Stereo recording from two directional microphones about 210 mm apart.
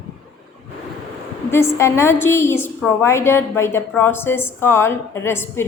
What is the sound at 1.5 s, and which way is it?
A woman's voice, 10° left (ahead or behind).